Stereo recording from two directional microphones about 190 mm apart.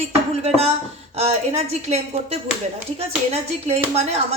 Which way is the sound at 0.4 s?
30° right (ahead or behind).